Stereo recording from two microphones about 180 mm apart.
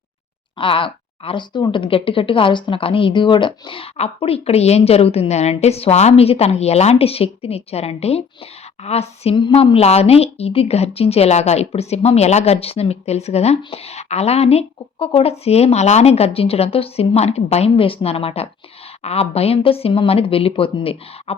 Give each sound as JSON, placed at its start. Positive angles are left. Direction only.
{"t": 0.6, "sound": "a woman's voice", "side_deg": 30}